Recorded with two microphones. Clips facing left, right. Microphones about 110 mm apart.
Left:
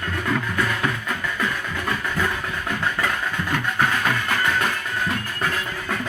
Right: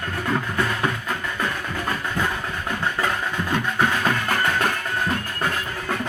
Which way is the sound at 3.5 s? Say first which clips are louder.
Right 1 dB; 20° right (ahead or behind).